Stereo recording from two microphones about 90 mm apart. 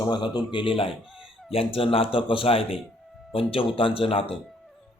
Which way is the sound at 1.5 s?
90° left.